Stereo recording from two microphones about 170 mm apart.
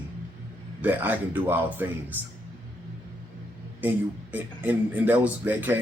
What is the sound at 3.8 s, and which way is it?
A man's voice, 10° right (ahead or behind).